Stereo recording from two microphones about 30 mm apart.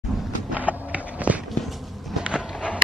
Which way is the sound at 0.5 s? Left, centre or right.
Right.